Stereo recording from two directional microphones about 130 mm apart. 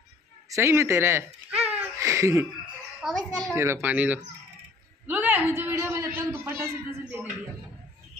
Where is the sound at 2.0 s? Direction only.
20° right (ahead or behind).